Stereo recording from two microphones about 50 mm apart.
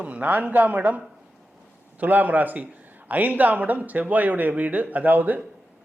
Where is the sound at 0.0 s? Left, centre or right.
Right.